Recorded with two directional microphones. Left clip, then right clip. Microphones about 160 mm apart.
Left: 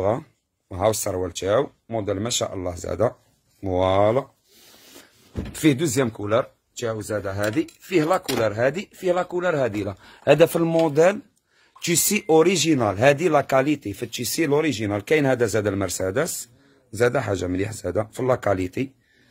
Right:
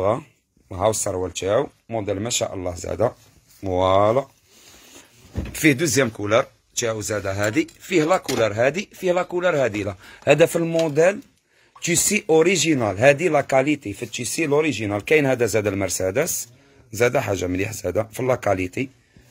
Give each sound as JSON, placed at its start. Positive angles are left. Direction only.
{"t": 0.7, "sound": "speech", "side_deg": 20}
{"t": 5.5, "sound": "speech", "side_deg": 0}
{"t": 10.0, "sound": "speech", "side_deg": 0}
{"t": 10.5, "sound": "speech", "side_deg": 30}
{"t": 16.9, "sound": "speech", "side_deg": 0}